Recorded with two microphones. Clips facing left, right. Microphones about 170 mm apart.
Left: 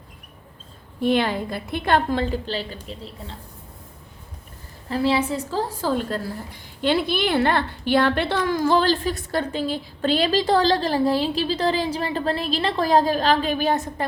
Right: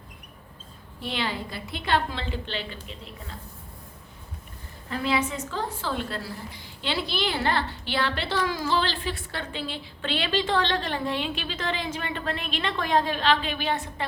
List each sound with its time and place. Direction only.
1.0 s a woman's voice: 50° left (ahead or behind); by 3.3 s 35° left (ahead or behind)
4.9 s a woman's voice: 30° left (ahead or behind)